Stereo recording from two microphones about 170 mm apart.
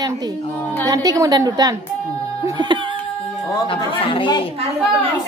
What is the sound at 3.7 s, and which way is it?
Speech, 30° left (ahead or behind).